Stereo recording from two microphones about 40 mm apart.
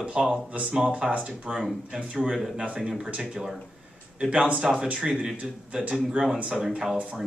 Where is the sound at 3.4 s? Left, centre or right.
Centre.